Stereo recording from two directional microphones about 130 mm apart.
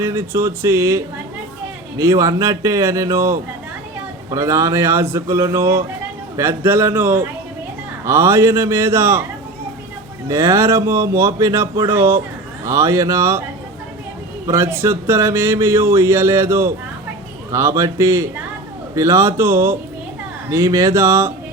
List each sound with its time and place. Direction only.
0.0 s a man's voice: 20° right (ahead or behind)
10.2 s a man's voice: 25° right (ahead or behind)
14.4 s a man's voice: 20° right (ahead or behind)